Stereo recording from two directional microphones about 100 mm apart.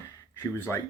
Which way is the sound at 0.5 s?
25° left (ahead or behind).